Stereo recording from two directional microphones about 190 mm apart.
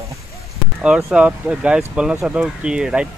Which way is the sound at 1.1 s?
5° right (ahead or behind).